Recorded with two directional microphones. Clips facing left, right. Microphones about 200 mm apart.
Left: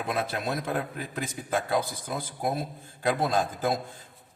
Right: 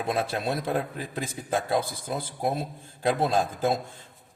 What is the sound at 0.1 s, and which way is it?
A man's voice, 30° right (ahead or behind).